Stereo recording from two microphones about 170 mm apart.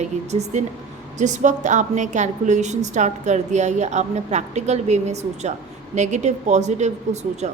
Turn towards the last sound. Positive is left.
turn(degrees=-40)  # may be behind; listen again after turning